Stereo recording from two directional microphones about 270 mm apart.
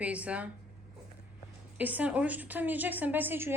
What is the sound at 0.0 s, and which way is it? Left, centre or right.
Speech, centre.